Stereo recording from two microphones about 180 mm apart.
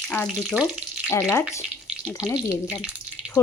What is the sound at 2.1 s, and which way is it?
Speech, 20° left (ahead or behind).